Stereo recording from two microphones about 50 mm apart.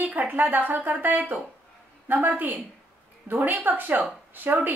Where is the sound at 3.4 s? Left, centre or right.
Right.